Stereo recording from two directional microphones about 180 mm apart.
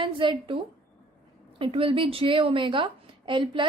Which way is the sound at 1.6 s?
30° right (ahead or behind).